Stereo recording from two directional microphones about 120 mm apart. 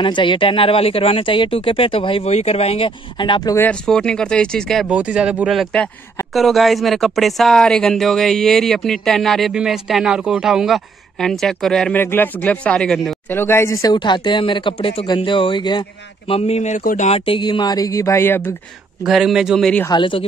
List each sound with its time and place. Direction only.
0.0 s speech: 45° left (ahead or behind)
3.8 s speech: 5° left (ahead or behind)
4.8 s speech: 10° right (ahead or behind); by 12.0 s 5° left (ahead or behind)
12.0 s speech: 15° left (ahead or behind)
13.3 s speech: 20° left (ahead or behind)
13.9 s speech: 40° left (ahead or behind)
16.3 s speech: 60° left (ahead or behind); by 17.2 s 85° left
17.2 s speech: 45° left (ahead or behind); by 18.5 s 20° left (ahead or behind)
19.0 s speech: centre (ahead or behind)
19.9 s speech: 45° left (ahead or behind)